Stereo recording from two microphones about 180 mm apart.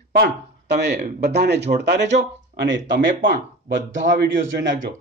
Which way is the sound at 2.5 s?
90° right.